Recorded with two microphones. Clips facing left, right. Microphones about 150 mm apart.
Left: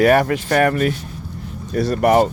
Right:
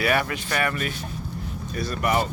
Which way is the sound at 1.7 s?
80° left.